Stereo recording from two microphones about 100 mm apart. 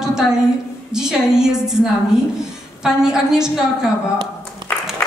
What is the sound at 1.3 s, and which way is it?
Speech, 5° right (ahead or behind).